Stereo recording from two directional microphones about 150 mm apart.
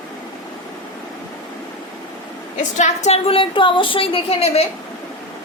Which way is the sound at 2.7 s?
50° left (ahead or behind).